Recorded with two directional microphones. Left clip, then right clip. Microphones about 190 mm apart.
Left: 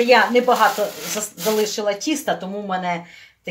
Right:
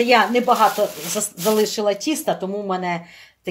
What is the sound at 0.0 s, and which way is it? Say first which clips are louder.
Speech: left 1 dB; 50° right (ahead or behind).